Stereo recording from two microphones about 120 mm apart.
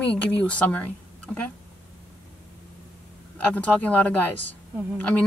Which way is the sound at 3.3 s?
10° left (ahead or behind).